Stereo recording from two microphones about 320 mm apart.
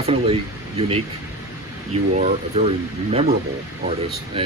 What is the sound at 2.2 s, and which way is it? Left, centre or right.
Speech, right.